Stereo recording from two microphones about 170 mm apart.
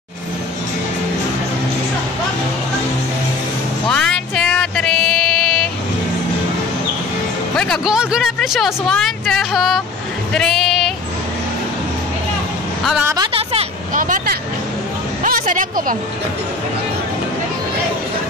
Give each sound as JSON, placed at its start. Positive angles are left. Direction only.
{"t": 3.9, "sound": "music", "side_deg": 5}
{"t": 7.5, "sound": "speech", "side_deg": 5}
{"t": 13.0, "sound": "speech", "side_deg": -20}
{"t": 13.4, "sound": "vehicle", "side_deg": -35}
{"t": 13.9, "sound": "vehicle", "side_deg": -50}
{"t": 15.2, "sound": "speech", "side_deg": -55}